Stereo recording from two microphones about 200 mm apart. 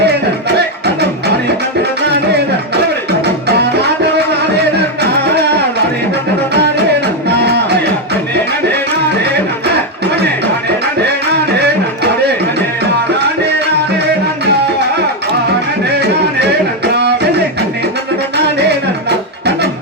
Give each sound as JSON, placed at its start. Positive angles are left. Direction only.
{"t": 0.0, "sound": "music", "side_deg": -55}
{"t": 3.1, "sound": "music", "side_deg": -55}
{"t": 7.3, "sound": "music", "side_deg": -55}
{"t": 15.9, "sound": "music", "side_deg": -55}